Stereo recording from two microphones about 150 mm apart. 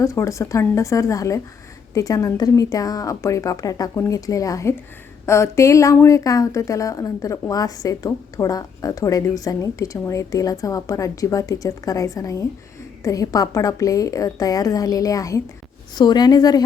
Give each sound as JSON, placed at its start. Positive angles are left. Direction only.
{"t": 0.0, "sound": "speech", "side_deg": 20}